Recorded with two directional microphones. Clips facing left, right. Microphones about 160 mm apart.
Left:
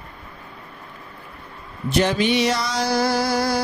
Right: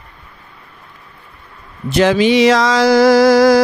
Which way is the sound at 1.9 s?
90° right.